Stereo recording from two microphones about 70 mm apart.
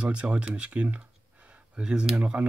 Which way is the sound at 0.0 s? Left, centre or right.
Centre.